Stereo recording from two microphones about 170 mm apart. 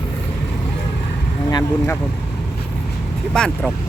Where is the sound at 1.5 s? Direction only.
20° left (ahead or behind).